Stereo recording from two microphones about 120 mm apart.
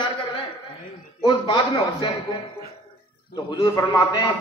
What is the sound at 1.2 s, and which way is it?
Speech, 40° left (ahead or behind).